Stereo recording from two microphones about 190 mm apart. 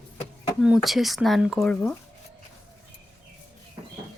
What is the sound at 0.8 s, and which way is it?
Speech, centre (ahead or behind).